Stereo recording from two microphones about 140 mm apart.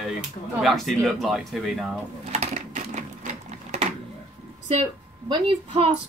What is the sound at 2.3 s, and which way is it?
Sewing machine, 50° right (ahead or behind).